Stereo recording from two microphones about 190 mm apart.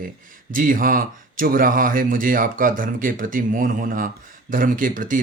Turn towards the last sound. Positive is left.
turn(degrees=-45)  # may be behind; listen again after turning